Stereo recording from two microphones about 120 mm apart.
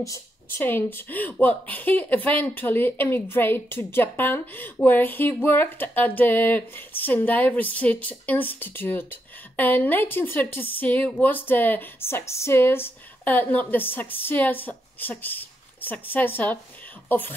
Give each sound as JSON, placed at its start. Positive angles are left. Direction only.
{"t": 0.0, "sound": "a woman's voice", "side_deg": 25}